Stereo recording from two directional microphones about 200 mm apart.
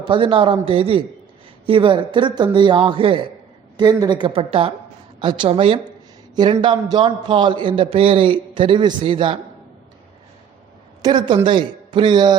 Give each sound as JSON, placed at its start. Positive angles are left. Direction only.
{"t": 0.0, "sound": "a man's voice", "side_deg": -25}
{"t": 11.0, "sound": "a man's voice", "side_deg": -25}